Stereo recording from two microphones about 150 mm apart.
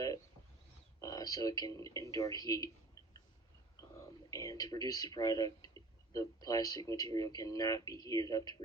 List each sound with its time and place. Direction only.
0.9 s speech: 25° left (ahead or behind)
4.3 s speech: 20° left (ahead or behind)